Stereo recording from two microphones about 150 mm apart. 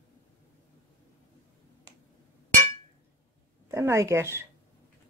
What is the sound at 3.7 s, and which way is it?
Speech, 20° right (ahead or behind).